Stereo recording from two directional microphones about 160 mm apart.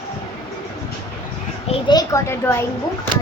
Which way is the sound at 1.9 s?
20° left (ahead or behind).